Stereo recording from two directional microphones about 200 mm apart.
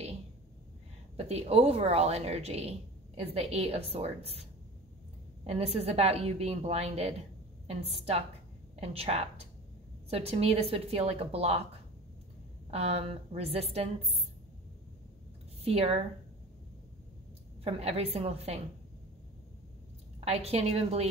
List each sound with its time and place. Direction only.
1.1 s a woman's voice: 30° right (ahead or behind)
5.5 s a woman's voice: 30° right (ahead or behind)
12.7 s speech: 30° right (ahead or behind)
15.6 s speech: 30° right (ahead or behind)
17.6 s a woman's voice: 30° right (ahead or behind)
20.2 s a woman's voice: 30° right (ahead or behind)